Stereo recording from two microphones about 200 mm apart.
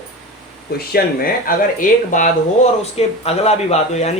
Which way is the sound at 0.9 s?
45° left (ahead or behind).